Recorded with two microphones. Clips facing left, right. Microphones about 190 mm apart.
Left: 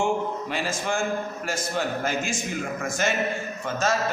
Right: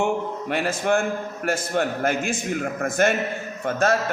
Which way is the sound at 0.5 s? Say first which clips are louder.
Right 9 dB; 60° right (ahead or behind).